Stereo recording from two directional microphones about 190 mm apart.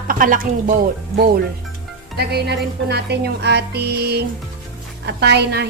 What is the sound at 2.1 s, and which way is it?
Speech, 60° right (ahead or behind).